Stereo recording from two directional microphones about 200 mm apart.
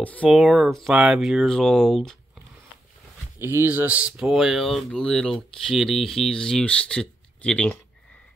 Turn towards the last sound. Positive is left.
turn(degrees=5)  # may be behind; listen again after turning